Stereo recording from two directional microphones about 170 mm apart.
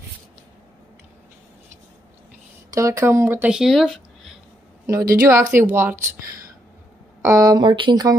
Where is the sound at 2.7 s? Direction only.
20° right (ahead or behind); by 4.3 s centre (ahead or behind).